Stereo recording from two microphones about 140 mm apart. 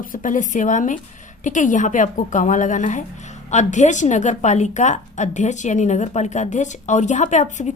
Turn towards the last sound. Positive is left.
turn(degrees=60)  # may be behind; listen again after turning